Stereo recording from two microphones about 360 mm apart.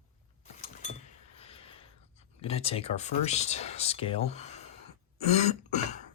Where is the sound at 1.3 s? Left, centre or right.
Centre.